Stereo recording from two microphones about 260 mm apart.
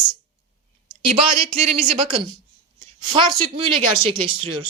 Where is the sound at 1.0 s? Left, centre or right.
Right.